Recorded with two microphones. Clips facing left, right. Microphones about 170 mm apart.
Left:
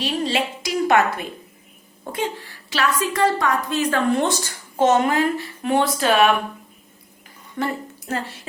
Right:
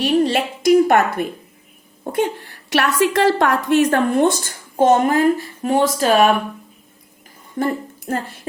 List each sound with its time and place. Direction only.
0.0 s a woman's voice: 55° right (ahead or behind); by 3.3 s 85° right
3.3 s a woman's voice: 70° right (ahead or behind); by 6.3 s 40° right (ahead or behind)
7.6 s a woman's voice: 50° right (ahead or behind)